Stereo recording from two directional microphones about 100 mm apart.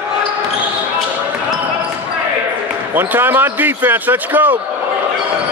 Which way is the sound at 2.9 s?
20° right (ahead or behind).